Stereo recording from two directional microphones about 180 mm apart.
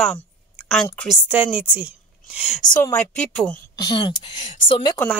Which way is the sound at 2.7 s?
10° left (ahead or behind).